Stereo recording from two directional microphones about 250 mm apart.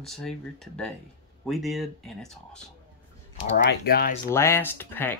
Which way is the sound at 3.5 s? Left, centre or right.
Left.